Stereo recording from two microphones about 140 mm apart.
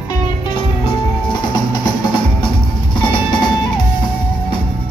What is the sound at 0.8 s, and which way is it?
Music, 30° left (ahead or behind).